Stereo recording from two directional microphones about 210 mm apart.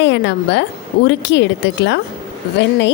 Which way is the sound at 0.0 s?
60° left (ahead or behind).